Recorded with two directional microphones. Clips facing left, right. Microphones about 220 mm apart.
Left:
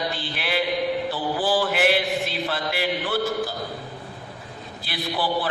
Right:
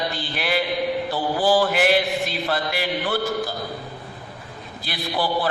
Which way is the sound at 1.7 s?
45° right (ahead or behind).